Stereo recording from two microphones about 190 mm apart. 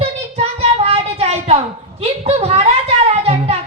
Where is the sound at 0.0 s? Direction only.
35° right (ahead or behind).